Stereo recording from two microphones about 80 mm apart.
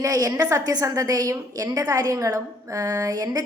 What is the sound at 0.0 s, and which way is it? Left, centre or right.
A woman's voice, right.